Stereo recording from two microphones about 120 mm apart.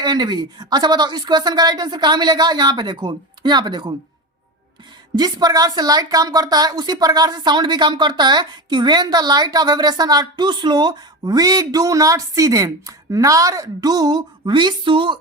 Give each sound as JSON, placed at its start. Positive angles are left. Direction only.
{"t": 0.0, "sound": "a woman's voice", "side_deg": -35}
{"t": 5.1, "sound": "a woman's voice", "side_deg": -35}